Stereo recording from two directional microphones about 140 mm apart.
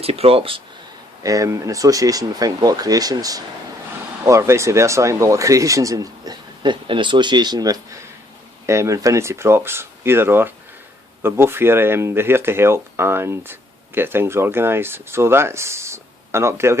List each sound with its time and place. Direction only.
0.0 s speech: 45° right (ahead or behind)
1.2 s speech: 25° right (ahead or behind)